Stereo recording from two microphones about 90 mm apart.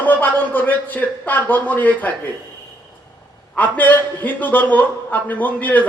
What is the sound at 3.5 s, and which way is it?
A man's voice, 20° left (ahead or behind).